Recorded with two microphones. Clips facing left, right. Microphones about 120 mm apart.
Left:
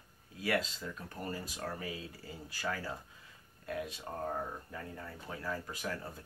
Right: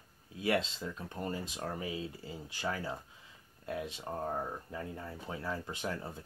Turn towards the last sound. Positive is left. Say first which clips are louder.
# right 2 dB
turn(degrees=-25)  # may be behind; listen again after turning